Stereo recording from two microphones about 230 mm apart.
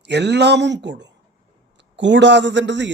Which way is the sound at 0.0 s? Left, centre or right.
Right.